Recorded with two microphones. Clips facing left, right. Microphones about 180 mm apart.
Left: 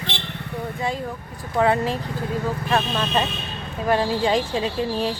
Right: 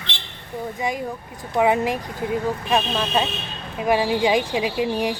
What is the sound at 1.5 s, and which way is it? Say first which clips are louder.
Speech: right 1 dB; 15° right (ahead or behind).